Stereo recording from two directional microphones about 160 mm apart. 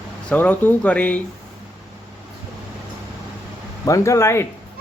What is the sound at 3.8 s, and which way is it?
Speech, 20° left (ahead or behind).